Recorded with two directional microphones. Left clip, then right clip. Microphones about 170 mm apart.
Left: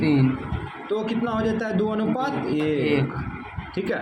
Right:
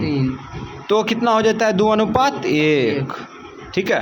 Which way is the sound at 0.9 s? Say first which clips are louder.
Right 10 dB; 45° right (ahead or behind).